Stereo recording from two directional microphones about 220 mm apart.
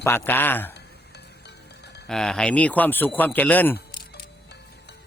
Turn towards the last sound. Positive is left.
turn(degrees=10)  # may be behind; listen again after turning